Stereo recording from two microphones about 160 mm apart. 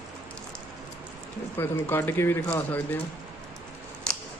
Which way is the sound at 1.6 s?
15° left (ahead or behind).